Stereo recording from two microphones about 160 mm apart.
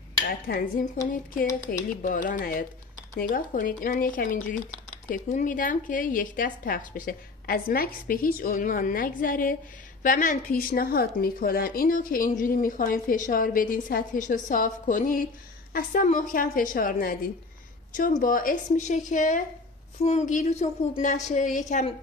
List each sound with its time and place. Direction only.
0.3 s dishes: 75° left (ahead or behind)
1.7 s a woman's voice: 60° left (ahead or behind)